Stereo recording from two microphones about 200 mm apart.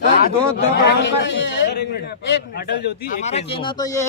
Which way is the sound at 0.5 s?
60° left (ahead or behind).